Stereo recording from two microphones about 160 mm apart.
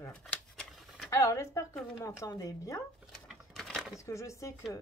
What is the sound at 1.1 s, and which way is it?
Speech, 20° left (ahead or behind).